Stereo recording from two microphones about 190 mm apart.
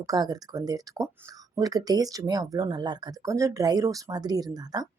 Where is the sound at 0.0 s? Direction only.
20° right (ahead or behind).